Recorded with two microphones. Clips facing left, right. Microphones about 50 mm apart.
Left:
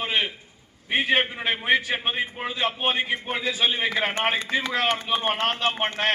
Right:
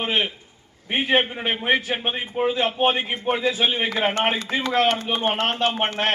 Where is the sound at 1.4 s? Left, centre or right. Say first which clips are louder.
Right 1 dB; centre.